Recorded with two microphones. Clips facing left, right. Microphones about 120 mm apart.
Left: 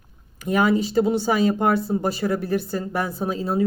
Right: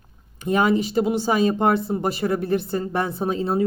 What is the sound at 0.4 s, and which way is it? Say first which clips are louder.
Speech: even; 25° right (ahead or behind).